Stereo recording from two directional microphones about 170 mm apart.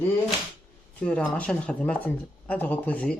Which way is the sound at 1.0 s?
5° left (ahead or behind).